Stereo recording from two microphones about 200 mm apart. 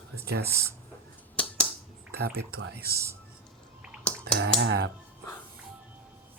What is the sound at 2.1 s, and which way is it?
Speech, 55° right (ahead or behind).